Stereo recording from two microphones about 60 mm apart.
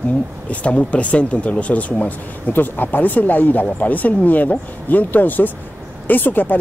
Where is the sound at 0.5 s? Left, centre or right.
Centre.